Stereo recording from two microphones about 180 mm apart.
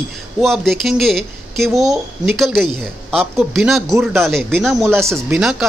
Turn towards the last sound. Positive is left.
turn(degrees=-5)  # may be behind; listen again after turning